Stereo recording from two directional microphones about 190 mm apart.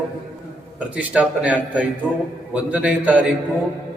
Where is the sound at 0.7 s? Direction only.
5° right (ahead or behind).